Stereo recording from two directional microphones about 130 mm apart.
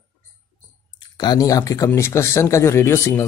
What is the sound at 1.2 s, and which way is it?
Speech, 30° left (ahead or behind).